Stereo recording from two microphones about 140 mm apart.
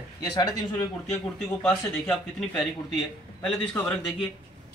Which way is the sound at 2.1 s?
5° left (ahead or behind).